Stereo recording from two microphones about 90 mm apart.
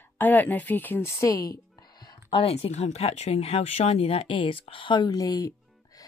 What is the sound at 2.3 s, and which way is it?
Speech, 80° left.